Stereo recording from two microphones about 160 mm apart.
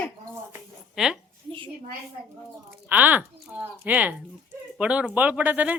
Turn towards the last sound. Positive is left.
turn(degrees=-10)  # may be behind; listen again after turning